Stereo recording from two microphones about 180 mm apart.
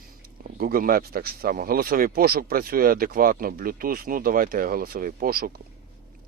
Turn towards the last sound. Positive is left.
turn(degrees=-55)  # may be behind; listen again after turning